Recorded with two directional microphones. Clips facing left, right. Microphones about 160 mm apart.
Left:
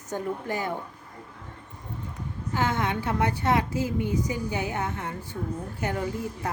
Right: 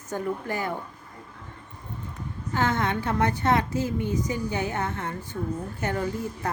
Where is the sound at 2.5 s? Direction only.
10° left (ahead or behind).